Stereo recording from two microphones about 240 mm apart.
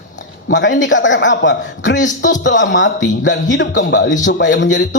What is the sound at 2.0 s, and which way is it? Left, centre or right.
Speech, left.